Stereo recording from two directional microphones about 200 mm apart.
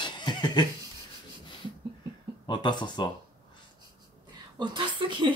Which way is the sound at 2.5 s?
20° left (ahead or behind).